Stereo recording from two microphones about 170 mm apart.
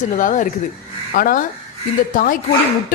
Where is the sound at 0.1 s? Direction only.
50° left (ahead or behind).